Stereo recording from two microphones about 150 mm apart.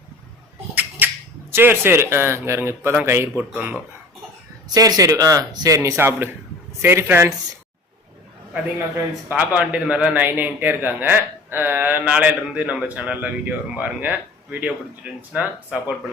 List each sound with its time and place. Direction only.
0.8 s a sound: 10° right (ahead or behind)
1.5 s a man's voice: 15° right (ahead or behind)
4.7 s a man's voice: 25° right (ahead or behind)
9.3 s a man's voice: 10° right (ahead or behind)